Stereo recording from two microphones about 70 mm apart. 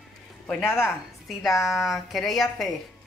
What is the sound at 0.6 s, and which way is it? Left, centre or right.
Speech, left.